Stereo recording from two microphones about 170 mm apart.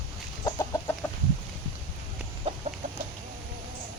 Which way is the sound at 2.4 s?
40° right (ahead or behind).